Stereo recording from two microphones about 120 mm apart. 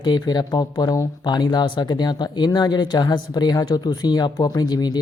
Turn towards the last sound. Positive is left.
turn(degrees=35)  # may be behind; listen again after turning